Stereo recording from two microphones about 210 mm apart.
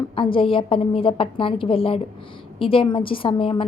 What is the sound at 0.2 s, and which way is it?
A woman's voice, 25° left (ahead or behind).